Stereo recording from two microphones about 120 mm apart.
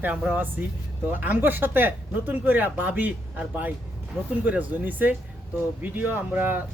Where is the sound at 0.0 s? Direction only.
10° right (ahead or behind).